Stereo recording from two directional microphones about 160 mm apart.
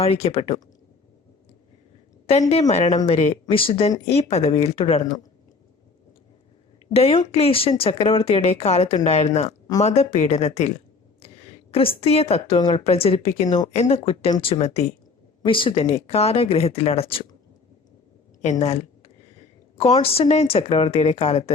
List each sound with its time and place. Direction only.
0.0 s speech: 40° left (ahead or behind)
2.5 s speech: 40° left (ahead or behind)
6.9 s speech: 35° left (ahead or behind)
11.7 s speech: 35° left (ahead or behind)
18.6 s a sound: 40° left (ahead or behind)
19.7 s speech: 40° left (ahead or behind)